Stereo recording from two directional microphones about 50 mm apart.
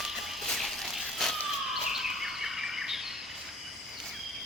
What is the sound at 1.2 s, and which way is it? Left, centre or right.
Police car, centre.